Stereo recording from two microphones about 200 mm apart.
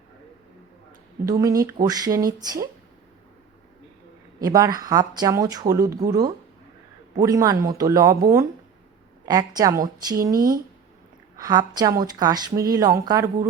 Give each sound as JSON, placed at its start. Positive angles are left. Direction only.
{"t": 1.2, "sound": "speech", "side_deg": -15}
{"t": 4.4, "sound": "speech", "side_deg": -15}
{"t": 9.2, "sound": "speech", "side_deg": -20}
{"t": 10.3, "sound": "speech", "side_deg": -45}
{"t": 11.3, "sound": "speech", "side_deg": -20}